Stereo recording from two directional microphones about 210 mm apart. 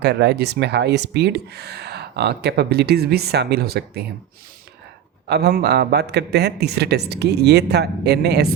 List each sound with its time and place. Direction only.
0.0 s speech: 55° right (ahead or behind)
5.3 s speech: 50° right (ahead or behind)